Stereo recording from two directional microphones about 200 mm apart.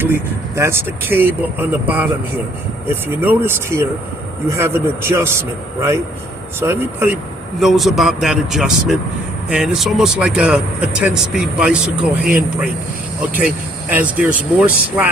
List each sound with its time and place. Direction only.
0.0 s a man's voice: 10° right (ahead or behind)
3.2 s a man's voice: 10° right (ahead or behind)
7.6 s speech: centre (ahead or behind)
13.9 s a man's voice: 10° right (ahead or behind)